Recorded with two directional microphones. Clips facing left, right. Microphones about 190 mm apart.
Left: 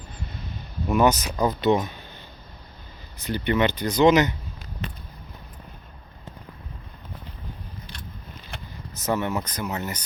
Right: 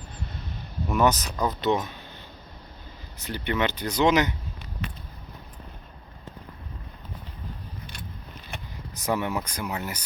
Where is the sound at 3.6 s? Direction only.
5° right (ahead or behind).